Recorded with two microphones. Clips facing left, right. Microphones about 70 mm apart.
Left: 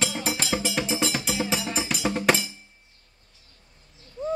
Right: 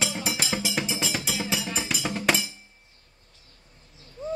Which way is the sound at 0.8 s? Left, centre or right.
Left.